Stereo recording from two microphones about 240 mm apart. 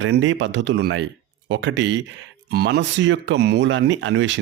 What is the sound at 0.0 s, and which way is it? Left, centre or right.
Speech, right.